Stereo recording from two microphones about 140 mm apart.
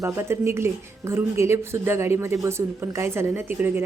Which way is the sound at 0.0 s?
20° right (ahead or behind).